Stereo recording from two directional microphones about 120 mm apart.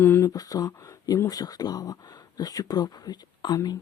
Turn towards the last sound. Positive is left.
turn(degrees=35)  # may be behind; listen again after turning